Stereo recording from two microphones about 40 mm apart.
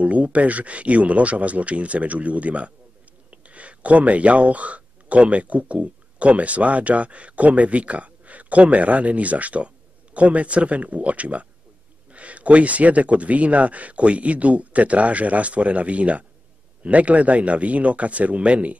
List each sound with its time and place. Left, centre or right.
0.0 s speech: right